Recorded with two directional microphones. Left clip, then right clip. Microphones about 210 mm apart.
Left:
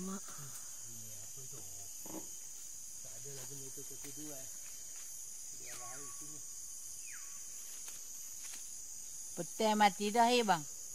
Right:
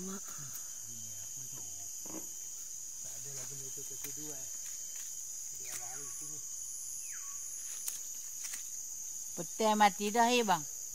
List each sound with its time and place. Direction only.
9.4 s cricket: 5° right (ahead or behind)